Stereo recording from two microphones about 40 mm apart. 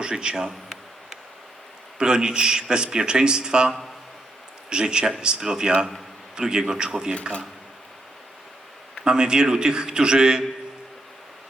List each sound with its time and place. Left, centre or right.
0.0 s a man's voice: right
2.0 s a man's voice: centre
9.0 s a man's voice: right